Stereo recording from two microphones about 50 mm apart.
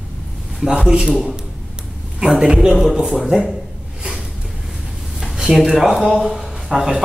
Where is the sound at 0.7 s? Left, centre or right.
Centre.